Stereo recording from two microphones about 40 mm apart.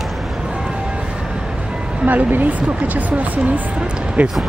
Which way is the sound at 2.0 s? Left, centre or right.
Right.